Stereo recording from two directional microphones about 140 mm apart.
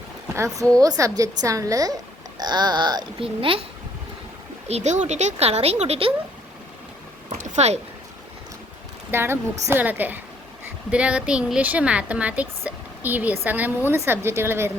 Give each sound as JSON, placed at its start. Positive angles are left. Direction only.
{"t": 0.3, "sound": "a woman's voice", "side_deg": -20}
{"t": 4.7, "sound": "speech", "side_deg": -55}
{"t": 7.3, "sound": "a sound", "side_deg": -60}
{"t": 9.1, "sound": "a woman's voice", "side_deg": -15}